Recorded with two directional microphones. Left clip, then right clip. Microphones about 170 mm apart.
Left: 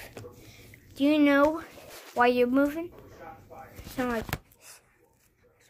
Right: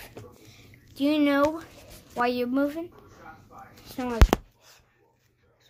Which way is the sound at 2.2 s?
5° left (ahead or behind).